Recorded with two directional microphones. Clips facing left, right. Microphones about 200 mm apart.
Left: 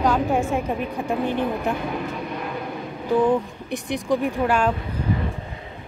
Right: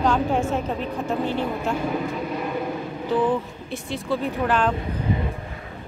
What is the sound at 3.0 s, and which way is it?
A woman's voice, 15° left (ahead or behind).